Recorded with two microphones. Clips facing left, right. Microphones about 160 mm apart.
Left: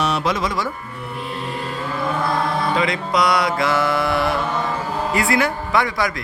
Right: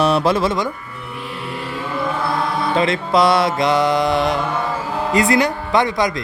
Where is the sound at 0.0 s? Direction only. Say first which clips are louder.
Right 5 dB; 35° right (ahead or behind).